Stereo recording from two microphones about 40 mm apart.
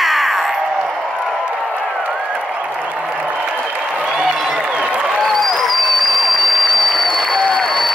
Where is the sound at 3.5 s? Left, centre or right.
Right.